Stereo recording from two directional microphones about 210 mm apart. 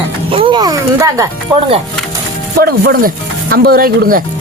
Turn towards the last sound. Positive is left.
turn(degrees=-45)  # may be behind; listen again after turning